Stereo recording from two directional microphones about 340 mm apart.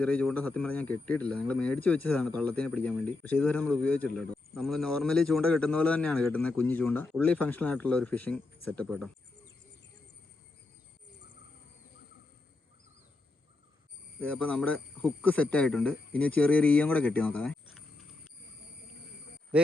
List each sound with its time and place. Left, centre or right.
0.0 s a man's voice: centre
14.2 s a man's voice: centre